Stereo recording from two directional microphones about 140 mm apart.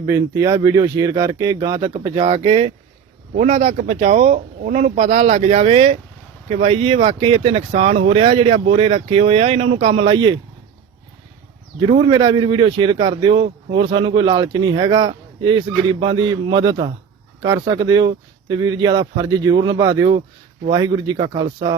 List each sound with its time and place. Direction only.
0.0 s speech: 25° right (ahead or behind)
2.3 s a man's voice: 40° right (ahead or behind)
3.3 s speech: 55° right (ahead or behind); by 10.4 s 35° right (ahead or behind)
11.9 s a man's voice: 35° right (ahead or behind)